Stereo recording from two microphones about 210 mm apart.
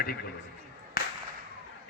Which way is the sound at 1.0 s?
45° left (ahead or behind).